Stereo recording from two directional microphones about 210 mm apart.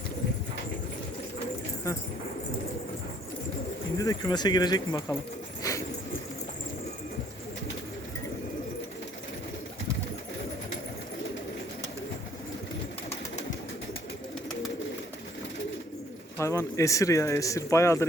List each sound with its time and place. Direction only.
3.9 s speech: 15° left (ahead or behind)
5.6 s pigeon: 15° left (ahead or behind)
16.4 s speech: 15° left (ahead or behind)